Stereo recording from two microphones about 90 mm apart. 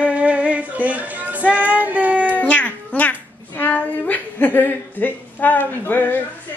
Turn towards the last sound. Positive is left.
turn(degrees=20)  # may be behind; listen again after turning